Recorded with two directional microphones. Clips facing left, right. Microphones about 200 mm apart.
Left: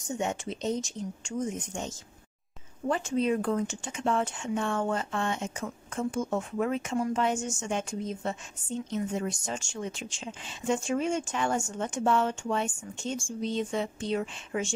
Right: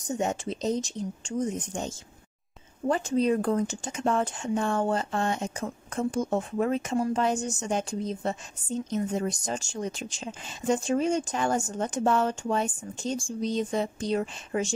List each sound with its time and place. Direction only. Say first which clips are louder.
0.1 s speech: right 3 dB; 40° right (ahead or behind)